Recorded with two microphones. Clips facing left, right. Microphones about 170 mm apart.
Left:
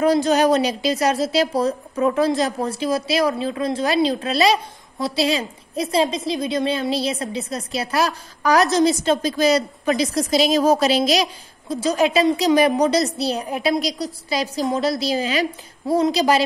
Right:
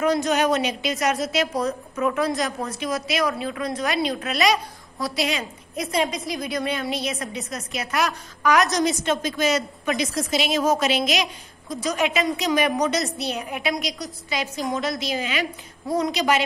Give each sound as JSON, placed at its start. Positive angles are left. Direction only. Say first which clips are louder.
{"t": 0.0, "sound": "a woman's voice", "louder": "left 4 dB", "side_deg": 30}